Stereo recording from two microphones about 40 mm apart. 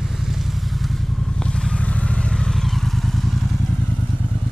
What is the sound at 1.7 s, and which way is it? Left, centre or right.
Vehicle, left.